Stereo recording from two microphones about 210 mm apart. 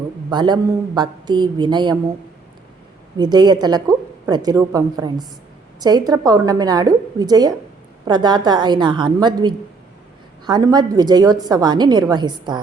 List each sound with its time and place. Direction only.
0.3 s a woman's voice: 20° right (ahead or behind)
3.2 s a woman's voice: 20° right (ahead or behind)